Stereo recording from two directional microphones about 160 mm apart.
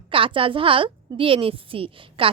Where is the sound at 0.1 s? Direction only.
35° right (ahead or behind).